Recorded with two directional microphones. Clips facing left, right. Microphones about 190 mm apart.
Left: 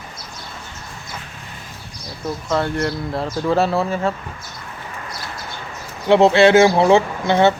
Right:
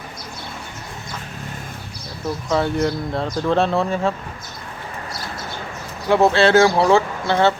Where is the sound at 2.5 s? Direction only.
Centre (ahead or behind).